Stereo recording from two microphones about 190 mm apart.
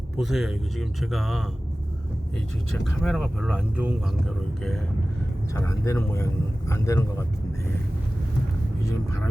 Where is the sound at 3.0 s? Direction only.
Centre (ahead or behind).